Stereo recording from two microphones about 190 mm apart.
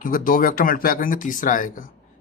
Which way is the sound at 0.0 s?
45° left (ahead or behind).